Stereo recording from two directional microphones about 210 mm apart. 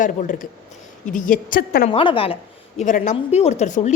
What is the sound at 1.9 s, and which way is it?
A woman's voice, 25° left (ahead or behind).